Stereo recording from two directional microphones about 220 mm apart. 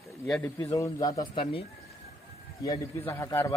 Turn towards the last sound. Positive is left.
turn(degrees=10)  # may be behind; listen again after turning